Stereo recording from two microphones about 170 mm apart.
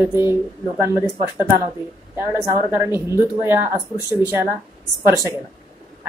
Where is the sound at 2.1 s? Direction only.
15° right (ahead or behind).